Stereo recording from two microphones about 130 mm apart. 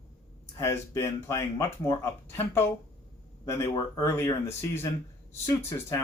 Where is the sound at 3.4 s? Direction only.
20° left (ahead or behind).